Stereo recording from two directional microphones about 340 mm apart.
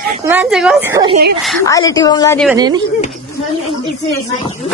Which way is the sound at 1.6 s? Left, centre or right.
Centre.